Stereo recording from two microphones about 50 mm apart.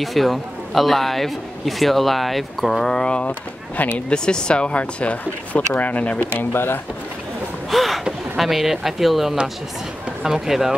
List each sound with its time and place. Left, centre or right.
0.0 s a man's voice: centre
2.9 s speech: centre
3.3 s speech: left
4.1 s speech: centre; by 6.2 s left
6.5 s speech: left
7.7 s gasp: centre
8.4 s a man's voice: centre